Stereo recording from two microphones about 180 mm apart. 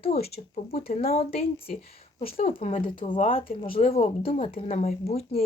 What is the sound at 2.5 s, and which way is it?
Speech, 35° left (ahead or behind).